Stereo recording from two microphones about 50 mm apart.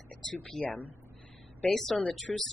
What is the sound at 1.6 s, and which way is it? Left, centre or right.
Speech, centre.